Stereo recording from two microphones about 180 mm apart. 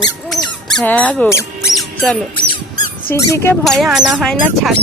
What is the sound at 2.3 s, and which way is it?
Squeak, 25° left (ahead or behind).